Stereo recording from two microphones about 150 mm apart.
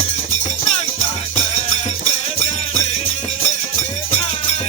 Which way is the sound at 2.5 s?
50° left (ahead or behind).